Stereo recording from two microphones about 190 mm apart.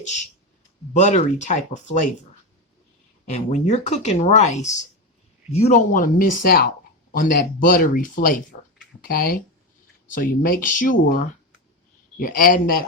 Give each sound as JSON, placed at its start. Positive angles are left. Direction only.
{"t": 0.9, "sound": "speech", "side_deg": 40}
{"t": 3.2, "sound": "speech", "side_deg": 35}